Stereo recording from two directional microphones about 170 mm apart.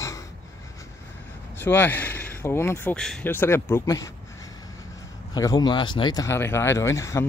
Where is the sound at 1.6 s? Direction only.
10° left (ahead or behind).